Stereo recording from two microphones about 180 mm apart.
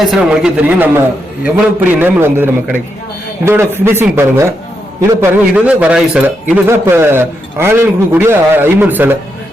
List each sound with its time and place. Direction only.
0.1 s a man's voice: 5° right (ahead or behind)